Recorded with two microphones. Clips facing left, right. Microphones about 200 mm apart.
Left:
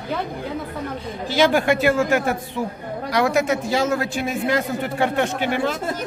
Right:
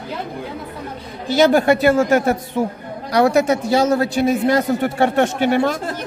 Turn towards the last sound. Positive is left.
turn(degrees=-45)  # may be behind; listen again after turning